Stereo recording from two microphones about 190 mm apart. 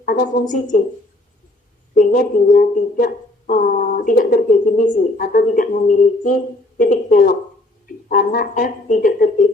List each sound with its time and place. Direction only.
0.0 s speech: 50° left (ahead or behind)
2.0 s speech: 45° left (ahead or behind)